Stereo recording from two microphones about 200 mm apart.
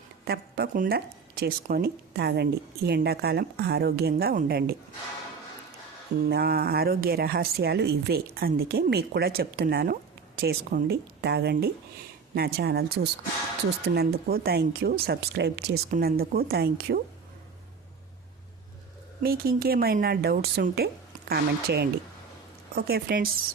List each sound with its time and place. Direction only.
0.3 s a woman's voice: 55° right (ahead or behind)
6.2 s a woman's voice: 50° right (ahead or behind)
19.2 s a woman's voice: 50° right (ahead or behind)